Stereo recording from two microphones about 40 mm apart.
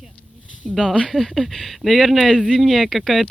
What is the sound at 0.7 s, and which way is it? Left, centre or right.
Speech, centre.